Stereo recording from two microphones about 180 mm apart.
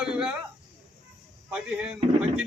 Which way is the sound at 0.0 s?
5° right (ahead or behind).